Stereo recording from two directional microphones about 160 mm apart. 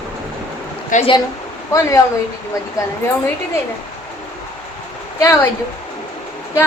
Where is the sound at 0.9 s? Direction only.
50° left (ahead or behind).